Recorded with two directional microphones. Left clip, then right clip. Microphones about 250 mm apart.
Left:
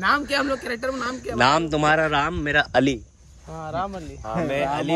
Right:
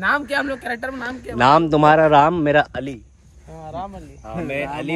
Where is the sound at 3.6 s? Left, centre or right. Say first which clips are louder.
Left 3 dB; left.